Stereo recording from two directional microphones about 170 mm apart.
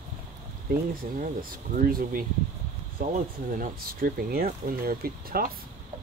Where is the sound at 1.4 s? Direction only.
55° right (ahead or behind).